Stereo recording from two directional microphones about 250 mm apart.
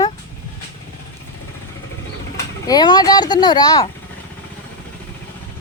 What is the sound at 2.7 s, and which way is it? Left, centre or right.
Speech, centre.